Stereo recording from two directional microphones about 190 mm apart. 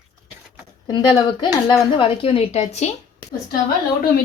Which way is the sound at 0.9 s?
20° left (ahead or behind).